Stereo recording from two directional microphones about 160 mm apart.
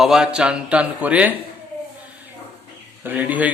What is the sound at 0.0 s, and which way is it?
Speech, 5° right (ahead or behind).